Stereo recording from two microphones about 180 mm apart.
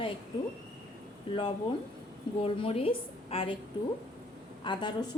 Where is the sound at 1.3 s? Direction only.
30° left (ahead or behind).